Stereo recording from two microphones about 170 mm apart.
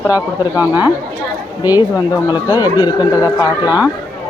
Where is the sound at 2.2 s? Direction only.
25° left (ahead or behind).